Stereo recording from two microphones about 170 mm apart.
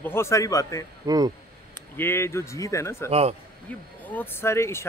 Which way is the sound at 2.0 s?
15° left (ahead or behind).